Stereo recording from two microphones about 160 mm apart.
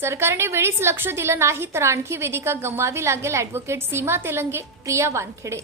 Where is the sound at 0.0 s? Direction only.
15° right (ahead or behind).